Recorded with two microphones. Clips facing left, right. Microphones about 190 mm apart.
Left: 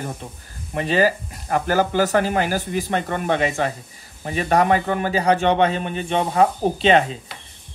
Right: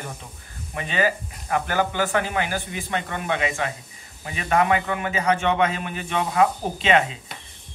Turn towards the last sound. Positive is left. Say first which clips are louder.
# left 4 dB
turn(degrees=35)  # may be behind; listen again after turning